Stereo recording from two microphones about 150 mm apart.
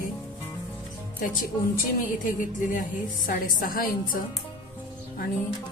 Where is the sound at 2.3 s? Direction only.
60° left (ahead or behind).